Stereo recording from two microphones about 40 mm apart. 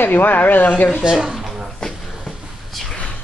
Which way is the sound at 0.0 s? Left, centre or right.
Left.